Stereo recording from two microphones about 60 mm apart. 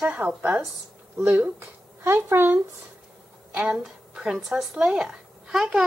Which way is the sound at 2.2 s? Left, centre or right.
Right.